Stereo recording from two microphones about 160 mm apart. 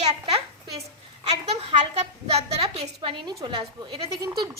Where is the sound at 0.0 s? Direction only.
45° right (ahead or behind).